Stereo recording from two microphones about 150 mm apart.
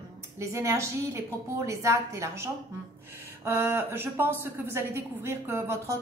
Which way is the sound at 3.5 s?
15° right (ahead or behind).